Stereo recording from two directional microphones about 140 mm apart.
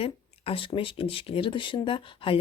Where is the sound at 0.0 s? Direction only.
40° left (ahead or behind).